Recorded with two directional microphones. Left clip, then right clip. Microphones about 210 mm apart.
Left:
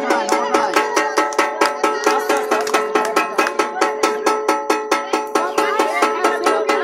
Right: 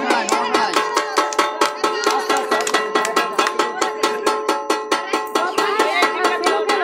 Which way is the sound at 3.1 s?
20° left (ahead or behind).